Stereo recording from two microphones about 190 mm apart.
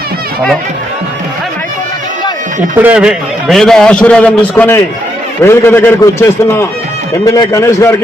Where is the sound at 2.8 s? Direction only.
5° right (ahead or behind).